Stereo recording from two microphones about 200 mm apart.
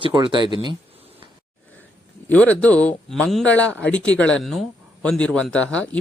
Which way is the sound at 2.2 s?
5° left (ahead or behind).